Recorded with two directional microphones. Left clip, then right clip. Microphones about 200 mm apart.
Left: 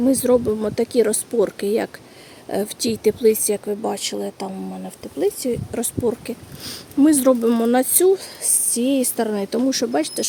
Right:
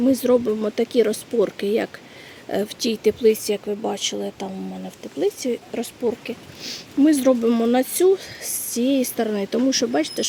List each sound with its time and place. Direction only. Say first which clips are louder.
0.0 s speech: left 1 dB; 5° left (ahead or behind)